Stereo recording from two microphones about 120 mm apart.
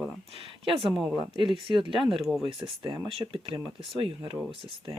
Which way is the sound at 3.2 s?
45° right (ahead or behind).